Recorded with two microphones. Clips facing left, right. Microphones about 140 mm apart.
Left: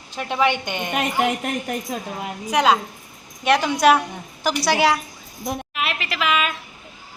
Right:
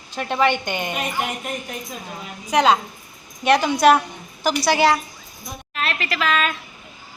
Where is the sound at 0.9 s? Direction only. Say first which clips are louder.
Left 4 dB; 85° left.